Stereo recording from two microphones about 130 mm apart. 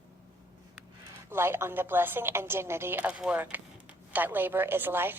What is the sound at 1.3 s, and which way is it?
A woman's voice, 20° right (ahead or behind).